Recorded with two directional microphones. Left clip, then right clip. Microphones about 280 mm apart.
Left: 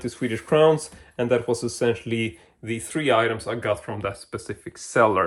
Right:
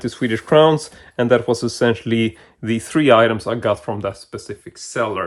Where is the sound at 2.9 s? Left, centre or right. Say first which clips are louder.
Right 8 dB; right.